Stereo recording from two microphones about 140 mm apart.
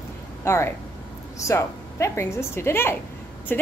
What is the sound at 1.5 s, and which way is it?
A woman's voice, 20° left (ahead or behind).